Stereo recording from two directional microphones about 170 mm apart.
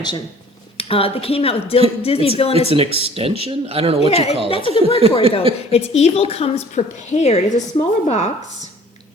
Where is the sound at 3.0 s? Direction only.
35° right (ahead or behind).